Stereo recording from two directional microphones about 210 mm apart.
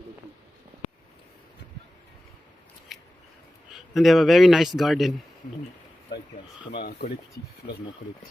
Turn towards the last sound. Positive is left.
turn(degrees=50)  # may be behind; listen again after turning